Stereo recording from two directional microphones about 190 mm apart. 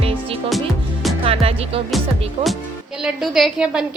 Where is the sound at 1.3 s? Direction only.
30° right (ahead or behind).